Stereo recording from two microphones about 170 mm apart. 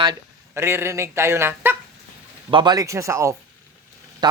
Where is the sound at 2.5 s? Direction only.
25° right (ahead or behind).